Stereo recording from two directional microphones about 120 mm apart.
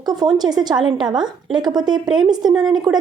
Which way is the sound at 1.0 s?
40° right (ahead or behind).